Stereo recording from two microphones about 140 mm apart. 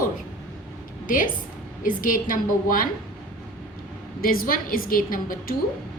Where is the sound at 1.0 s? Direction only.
75° left (ahead or behind).